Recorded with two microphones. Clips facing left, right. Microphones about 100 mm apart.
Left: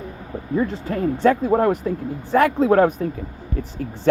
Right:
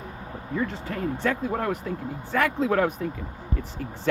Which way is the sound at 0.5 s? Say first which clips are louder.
Left 7 dB; 35° left (ahead or behind).